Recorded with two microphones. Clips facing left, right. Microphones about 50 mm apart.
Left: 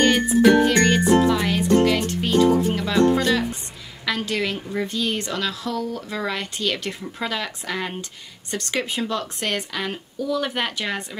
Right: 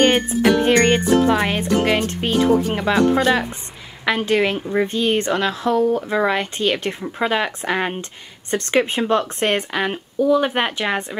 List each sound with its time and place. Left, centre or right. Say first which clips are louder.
0.4 s a woman's voice: even; right